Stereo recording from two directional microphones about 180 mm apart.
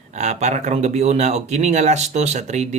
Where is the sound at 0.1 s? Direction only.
40° right (ahead or behind).